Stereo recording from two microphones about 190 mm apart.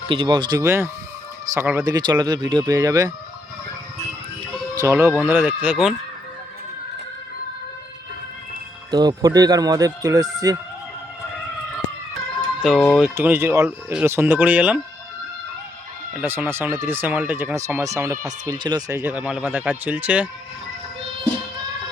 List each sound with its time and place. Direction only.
0.1 s speech: 25° right (ahead or behind)
4.7 s speech: 15° right (ahead or behind)
8.9 s speech: 20° right (ahead or behind)
12.4 s a sound: 5° left (ahead or behind)
13.1 s speech: 10° right (ahead or behind)
16.2 s speech: 10° right (ahead or behind)